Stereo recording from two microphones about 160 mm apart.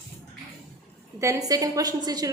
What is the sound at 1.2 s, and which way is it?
A woman's voice, 20° right (ahead or behind).